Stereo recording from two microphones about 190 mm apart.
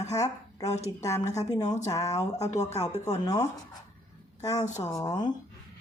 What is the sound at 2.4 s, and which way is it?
Speech, 35° left (ahead or behind).